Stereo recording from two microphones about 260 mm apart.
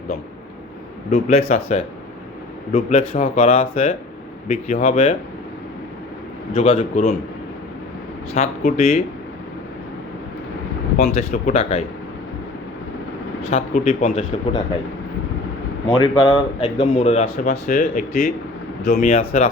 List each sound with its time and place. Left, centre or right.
1.1 s speech: left
6.5 s speech: left
8.3 s speech: left
10.9 s speech: left
13.5 s speech: left
16.0 s speech: centre
17.2 s speech: left